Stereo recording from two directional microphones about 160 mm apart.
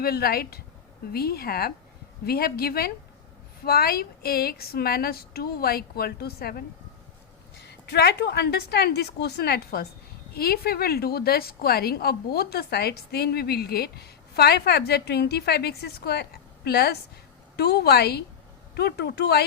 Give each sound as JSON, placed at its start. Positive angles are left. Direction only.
{"t": 0.0, "sound": "speech", "side_deg": 70}
{"t": 7.7, "sound": "a woman's voice", "side_deg": 90}
{"t": 10.3, "sound": "a woman's voice", "side_deg": 75}